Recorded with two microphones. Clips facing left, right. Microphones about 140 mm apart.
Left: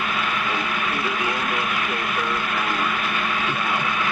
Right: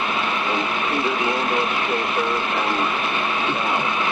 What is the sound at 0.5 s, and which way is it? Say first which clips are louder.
Vehicle: right 3 dB; 25° right (ahead or behind).